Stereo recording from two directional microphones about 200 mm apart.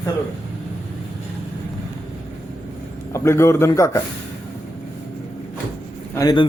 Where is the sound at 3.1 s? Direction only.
15° left (ahead or behind).